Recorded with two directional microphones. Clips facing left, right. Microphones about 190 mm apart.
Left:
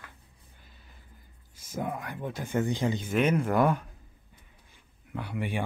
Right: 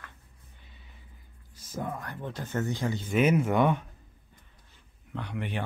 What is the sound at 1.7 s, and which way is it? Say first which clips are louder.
Speech: left 2 dB; 10° left (ahead or behind).